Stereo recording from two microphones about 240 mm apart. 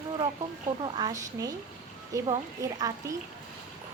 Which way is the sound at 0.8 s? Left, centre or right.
Centre.